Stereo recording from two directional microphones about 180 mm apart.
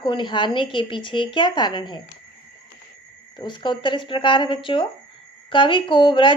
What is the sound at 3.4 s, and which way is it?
Speech, 25° left (ahead or behind).